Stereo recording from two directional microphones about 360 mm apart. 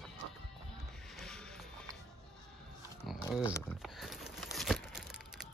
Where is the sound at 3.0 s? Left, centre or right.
Centre.